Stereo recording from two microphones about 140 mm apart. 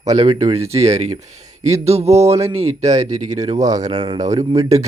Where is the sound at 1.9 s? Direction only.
50° right (ahead or behind).